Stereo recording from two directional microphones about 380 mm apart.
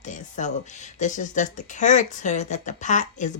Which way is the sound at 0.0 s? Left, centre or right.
Centre.